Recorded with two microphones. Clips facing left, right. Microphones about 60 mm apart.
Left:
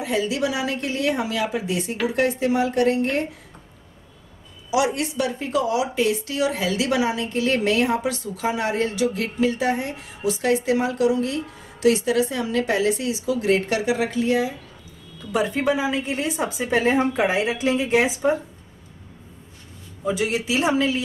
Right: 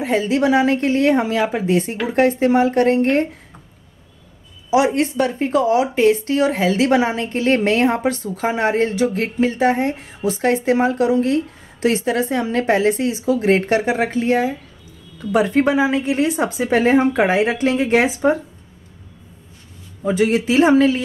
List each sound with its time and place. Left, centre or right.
0.0 s speech: right
4.6 s a woman's voice: right
20.1 s speech: right